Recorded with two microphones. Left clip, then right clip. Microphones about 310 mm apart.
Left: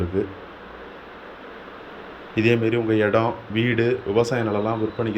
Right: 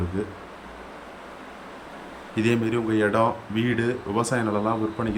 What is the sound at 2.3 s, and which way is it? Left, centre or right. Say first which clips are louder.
Speech: left 4 dB; centre.